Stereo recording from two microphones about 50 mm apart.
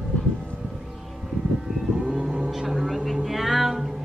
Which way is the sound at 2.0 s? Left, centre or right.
Centre.